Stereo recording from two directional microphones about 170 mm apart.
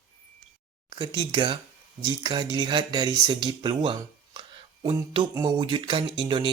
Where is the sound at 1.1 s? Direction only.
30° right (ahead or behind).